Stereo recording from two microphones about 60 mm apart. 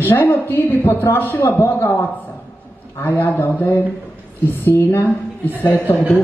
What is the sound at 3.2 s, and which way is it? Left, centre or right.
Speech, left.